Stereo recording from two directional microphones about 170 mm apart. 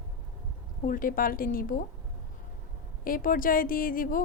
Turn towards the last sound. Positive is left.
turn(degrees=55)  # may be behind; listen again after turning